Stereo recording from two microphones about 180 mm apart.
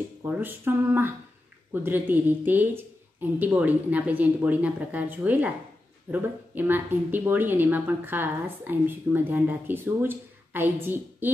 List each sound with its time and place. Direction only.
0.2 s speech: 10° right (ahead or behind)